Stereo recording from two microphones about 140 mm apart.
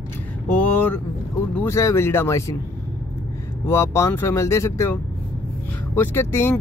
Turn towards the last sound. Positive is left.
turn(degrees=20)  # may be behind; listen again after turning